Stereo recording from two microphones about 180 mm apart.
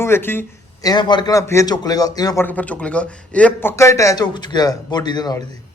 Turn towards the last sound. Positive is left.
turn(degrees=25)  # may be behind; listen again after turning